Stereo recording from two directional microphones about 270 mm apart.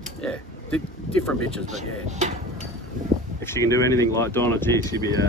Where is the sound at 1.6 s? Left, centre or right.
Right.